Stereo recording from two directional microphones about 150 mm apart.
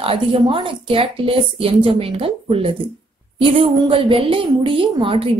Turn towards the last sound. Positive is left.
turn(degrees=-35)  # may be behind; listen again after turning